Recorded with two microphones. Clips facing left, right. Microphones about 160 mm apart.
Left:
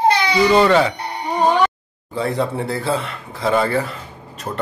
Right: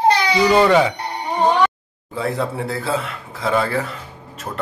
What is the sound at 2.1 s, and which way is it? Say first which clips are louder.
Speech: left 2 dB; centre (ahead or behind).